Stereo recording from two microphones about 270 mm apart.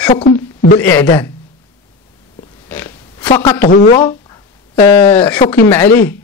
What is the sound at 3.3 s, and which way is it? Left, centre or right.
Speech, centre.